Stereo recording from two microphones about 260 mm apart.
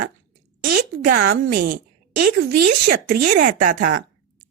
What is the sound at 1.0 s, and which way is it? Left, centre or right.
A woman's voice, right.